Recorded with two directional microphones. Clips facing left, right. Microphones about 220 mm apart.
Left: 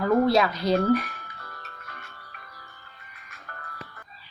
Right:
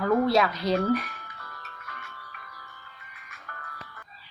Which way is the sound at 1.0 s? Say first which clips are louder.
Left 2 dB; 40° left (ahead or behind).